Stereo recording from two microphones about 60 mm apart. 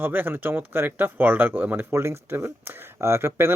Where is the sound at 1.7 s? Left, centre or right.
Right.